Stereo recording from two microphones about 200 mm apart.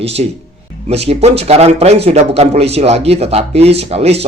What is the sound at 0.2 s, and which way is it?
A man's voice, 35° right (ahead or behind).